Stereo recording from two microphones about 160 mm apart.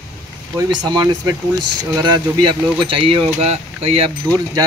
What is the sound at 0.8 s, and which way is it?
Speech, 25° right (ahead or behind).